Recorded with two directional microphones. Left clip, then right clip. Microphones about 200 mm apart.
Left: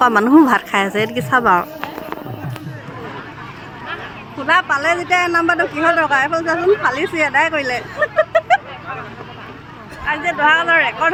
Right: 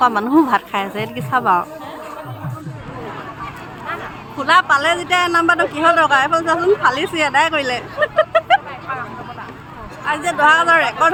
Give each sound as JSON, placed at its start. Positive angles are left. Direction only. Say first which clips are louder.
{"t": 0.0, "sound": "a woman's voice", "louder": "left 3 dB", "side_deg": 25}
{"t": 4.4, "sound": "a man's voice", "louder": "right 2 dB", "side_deg": 10}
{"t": 10.1, "sound": "speech", "louder": "right 1 dB", "side_deg": 0}